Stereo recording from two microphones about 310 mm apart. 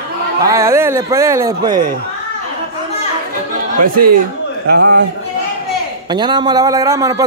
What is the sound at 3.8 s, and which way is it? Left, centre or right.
A man's voice, right.